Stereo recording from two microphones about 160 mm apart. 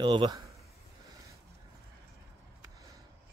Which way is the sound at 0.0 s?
30° right (ahead or behind).